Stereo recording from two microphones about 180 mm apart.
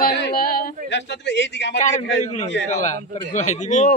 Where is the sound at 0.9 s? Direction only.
75° left (ahead or behind).